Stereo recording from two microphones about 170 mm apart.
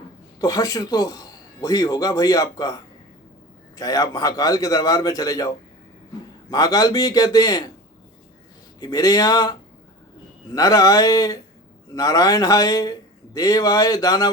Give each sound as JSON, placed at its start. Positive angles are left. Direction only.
{"t": 0.3, "sound": "speech", "side_deg": 20}
{"t": 6.5, "sound": "speech", "side_deg": 20}
{"t": 8.8, "sound": "speech", "side_deg": 20}